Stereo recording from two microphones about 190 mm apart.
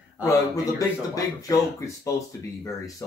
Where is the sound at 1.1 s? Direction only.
15° left (ahead or behind).